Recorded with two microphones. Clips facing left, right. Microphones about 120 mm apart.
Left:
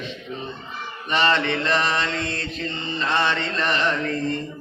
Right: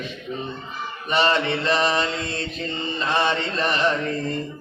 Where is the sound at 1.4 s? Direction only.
35° right (ahead or behind).